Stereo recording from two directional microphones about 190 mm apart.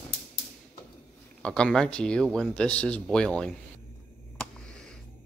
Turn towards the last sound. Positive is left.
turn(degrees=5)  # may be behind; listen again after turning